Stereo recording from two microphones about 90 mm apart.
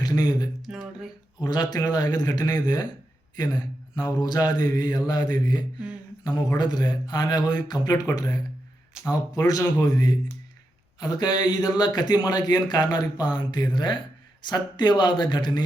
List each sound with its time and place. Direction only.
0.0 s speech: 50° left (ahead or behind)
0.6 s a sound: 5° right (ahead or behind)
1.4 s mantra: 50° left (ahead or behind)
8.9 s speech: 10° right (ahead or behind)
9.8 s mantra: 45° left (ahead or behind)
14.4 s speech: 55° left (ahead or behind)